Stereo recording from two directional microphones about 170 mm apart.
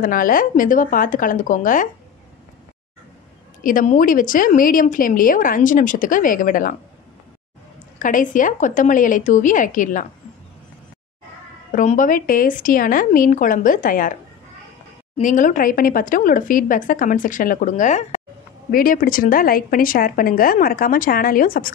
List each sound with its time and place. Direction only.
0.0 s a woman's voice: 55° left (ahead or behind)
3.6 s a woman's voice: 50° left (ahead or behind)
8.0 s a woman's voice: 50° left (ahead or behind)
11.7 s a woman's voice: 45° left (ahead or behind)
15.1 s a woman's voice: 50° left (ahead or behind)
18.7 s a woman's voice: 60° left (ahead or behind)